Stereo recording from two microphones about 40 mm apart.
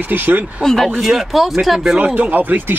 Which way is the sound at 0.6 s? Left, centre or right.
Centre.